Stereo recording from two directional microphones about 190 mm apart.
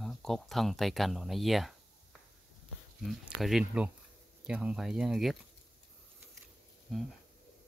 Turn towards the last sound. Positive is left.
turn(degrees=0)  # may be behind; listen again after turning